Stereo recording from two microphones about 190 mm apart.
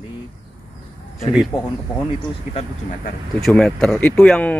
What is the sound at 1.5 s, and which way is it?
Speech, 20° left (ahead or behind).